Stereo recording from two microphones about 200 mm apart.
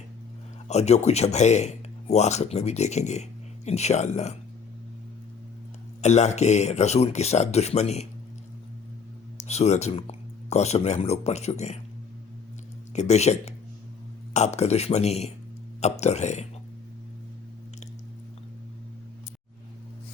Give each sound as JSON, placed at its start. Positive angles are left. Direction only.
{"t": 0.7, "sound": "speech", "side_deg": 35}
{"t": 6.0, "sound": "speech", "side_deg": 35}
{"t": 9.4, "sound": "speech", "side_deg": 35}
{"t": 12.9, "sound": "speech", "side_deg": 35}